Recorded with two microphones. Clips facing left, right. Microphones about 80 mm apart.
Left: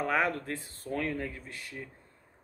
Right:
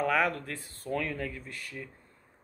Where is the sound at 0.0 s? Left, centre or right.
Left.